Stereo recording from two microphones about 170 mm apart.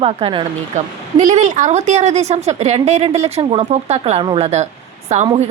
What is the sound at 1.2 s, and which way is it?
A woman's voice, 45° right (ahead or behind).